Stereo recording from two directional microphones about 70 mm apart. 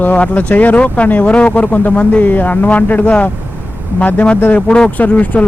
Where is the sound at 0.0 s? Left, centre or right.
Left.